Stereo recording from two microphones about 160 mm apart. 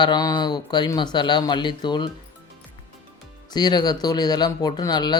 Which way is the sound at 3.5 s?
25° left (ahead or behind).